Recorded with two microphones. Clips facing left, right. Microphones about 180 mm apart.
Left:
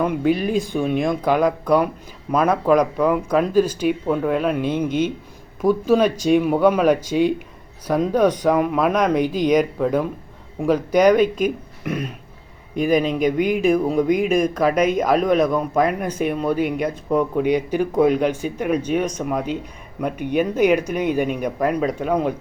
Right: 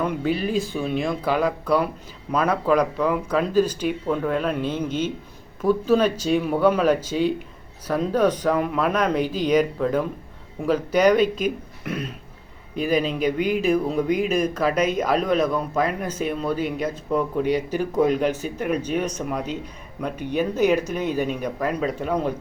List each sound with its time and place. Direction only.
0.0 s speech: 10° left (ahead or behind)
12.7 s speech: 50° left (ahead or behind)
13.7 s speech: 10° left (ahead or behind)